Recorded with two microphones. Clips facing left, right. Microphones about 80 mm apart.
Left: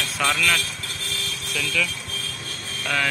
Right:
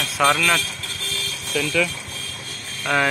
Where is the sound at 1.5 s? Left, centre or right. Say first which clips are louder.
Right 5 dB; right.